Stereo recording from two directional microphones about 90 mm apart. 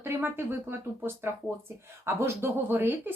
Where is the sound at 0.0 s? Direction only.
25° right (ahead or behind).